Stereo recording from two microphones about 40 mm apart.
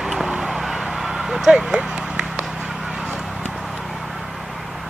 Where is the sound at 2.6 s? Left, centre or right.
Centre.